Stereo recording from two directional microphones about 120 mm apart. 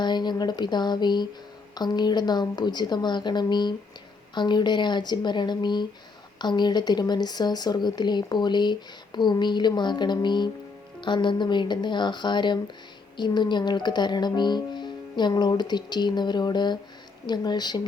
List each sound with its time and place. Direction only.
0.0 s a woman's voice: 40° left (ahead or behind)